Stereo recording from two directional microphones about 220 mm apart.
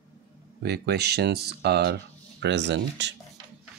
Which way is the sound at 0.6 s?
50° right (ahead or behind).